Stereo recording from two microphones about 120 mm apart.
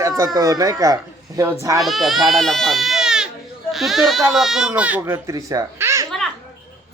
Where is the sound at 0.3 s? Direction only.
30° right (ahead or behind).